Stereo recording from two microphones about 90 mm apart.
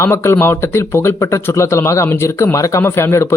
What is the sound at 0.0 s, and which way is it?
A man's voice, 30° left (ahead or behind).